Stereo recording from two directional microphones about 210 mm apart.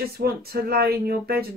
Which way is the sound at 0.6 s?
50° right (ahead or behind).